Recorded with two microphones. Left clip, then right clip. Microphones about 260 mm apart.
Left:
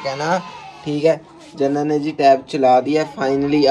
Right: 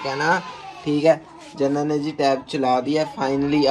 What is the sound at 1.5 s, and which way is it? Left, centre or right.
Speech, centre.